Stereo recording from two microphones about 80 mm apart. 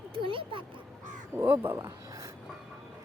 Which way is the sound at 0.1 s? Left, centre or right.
Right.